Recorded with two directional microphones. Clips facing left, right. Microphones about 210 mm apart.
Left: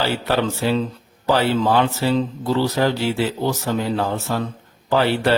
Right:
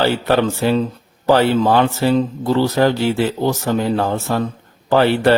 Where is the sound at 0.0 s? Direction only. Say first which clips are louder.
Right 5 dB; 55° right (ahead or behind).